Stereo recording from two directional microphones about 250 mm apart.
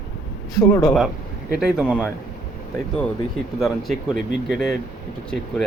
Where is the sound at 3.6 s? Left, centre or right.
Centre.